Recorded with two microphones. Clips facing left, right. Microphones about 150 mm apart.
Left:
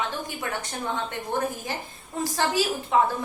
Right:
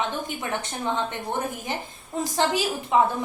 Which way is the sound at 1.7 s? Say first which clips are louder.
Right 3 dB; 20° right (ahead or behind).